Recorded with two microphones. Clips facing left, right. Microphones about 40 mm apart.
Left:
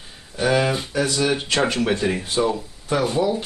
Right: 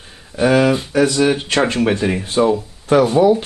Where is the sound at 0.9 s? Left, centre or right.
Right.